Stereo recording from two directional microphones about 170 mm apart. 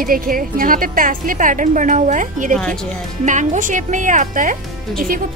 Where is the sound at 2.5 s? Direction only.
5° left (ahead or behind).